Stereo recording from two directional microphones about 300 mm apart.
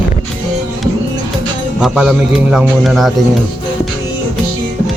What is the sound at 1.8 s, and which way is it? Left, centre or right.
Speech, centre.